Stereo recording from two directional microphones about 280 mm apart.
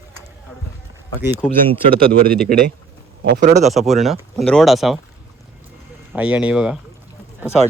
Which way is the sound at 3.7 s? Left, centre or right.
Centre.